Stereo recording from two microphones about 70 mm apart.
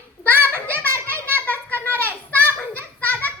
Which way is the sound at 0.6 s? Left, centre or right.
Left.